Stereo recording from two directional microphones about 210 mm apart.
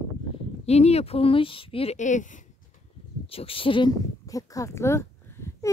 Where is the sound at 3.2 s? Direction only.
25° left (ahead or behind).